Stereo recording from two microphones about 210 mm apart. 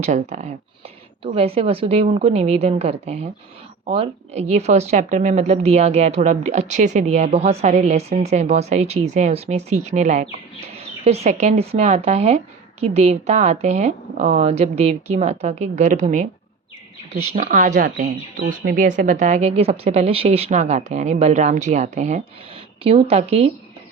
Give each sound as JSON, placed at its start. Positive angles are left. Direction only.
{"t": 0.0, "sound": "a woman's voice", "side_deg": -35}
{"t": 17.3, "sound": "speech", "side_deg": -40}